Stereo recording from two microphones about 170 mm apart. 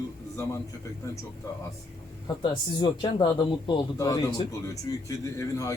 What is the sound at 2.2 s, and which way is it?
Speech, 25° left (ahead or behind).